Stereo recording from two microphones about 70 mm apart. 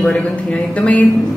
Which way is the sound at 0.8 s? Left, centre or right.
Centre.